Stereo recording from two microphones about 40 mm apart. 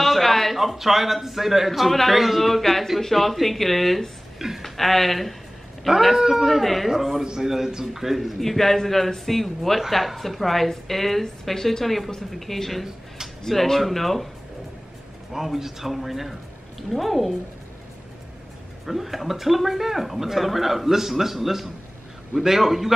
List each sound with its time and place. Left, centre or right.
0.0 s a sound: centre
0.6 s a man's voice: centre
5.9 s a man's voice: centre
15.3 s a man's voice: centre
18.9 s a man's voice: centre